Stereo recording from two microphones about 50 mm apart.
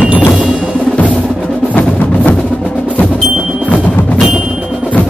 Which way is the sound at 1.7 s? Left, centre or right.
Left.